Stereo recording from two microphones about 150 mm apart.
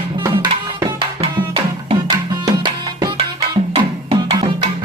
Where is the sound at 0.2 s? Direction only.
25° right (ahead or behind); by 4.4 s 40° right (ahead or behind).